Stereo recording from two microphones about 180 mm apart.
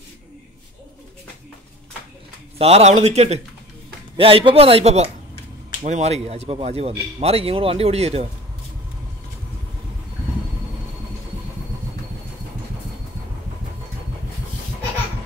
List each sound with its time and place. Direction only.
2.6 s speech: 35° right (ahead or behind)